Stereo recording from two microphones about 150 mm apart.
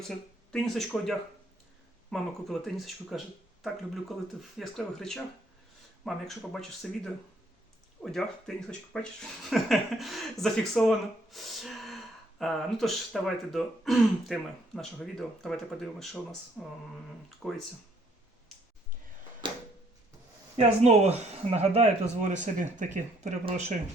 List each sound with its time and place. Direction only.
0.5 s speech: centre (ahead or behind)
19.4 s a sound: 30° right (ahead or behind)
20.6 s speech: 45° right (ahead or behind)